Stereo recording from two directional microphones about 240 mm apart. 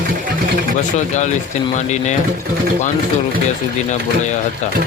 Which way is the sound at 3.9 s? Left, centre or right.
Left.